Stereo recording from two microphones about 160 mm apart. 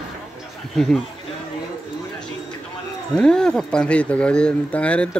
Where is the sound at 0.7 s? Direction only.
Centre (ahead or behind).